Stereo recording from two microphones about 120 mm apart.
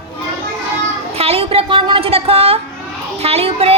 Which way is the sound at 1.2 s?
55° right (ahead or behind).